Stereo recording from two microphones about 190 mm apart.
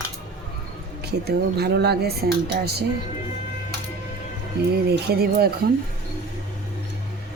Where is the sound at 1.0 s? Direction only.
60° right (ahead or behind).